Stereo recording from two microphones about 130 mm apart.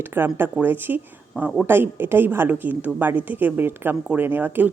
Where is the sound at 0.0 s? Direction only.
15° right (ahead or behind).